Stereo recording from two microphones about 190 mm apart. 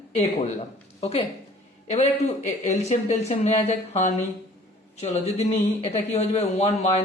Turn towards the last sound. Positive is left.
turn(degrees=35)  # may be behind; listen again after turning